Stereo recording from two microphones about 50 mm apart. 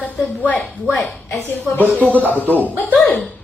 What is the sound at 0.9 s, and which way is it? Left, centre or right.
Speech, centre.